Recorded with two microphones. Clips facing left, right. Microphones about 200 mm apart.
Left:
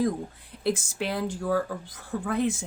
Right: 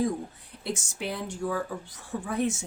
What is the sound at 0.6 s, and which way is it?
Speech, 90° left.